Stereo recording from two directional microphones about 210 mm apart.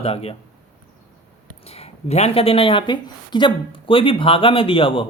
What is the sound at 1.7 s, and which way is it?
Speech, 30° left (ahead or behind).